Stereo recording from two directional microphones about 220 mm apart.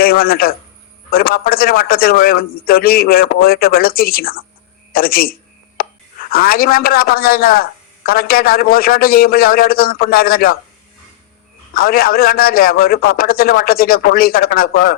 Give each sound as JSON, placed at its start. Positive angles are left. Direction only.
{"t": 0.0, "sound": "a man's voice", "side_deg": 40}
{"t": 11.7, "sound": "speech", "side_deg": 40}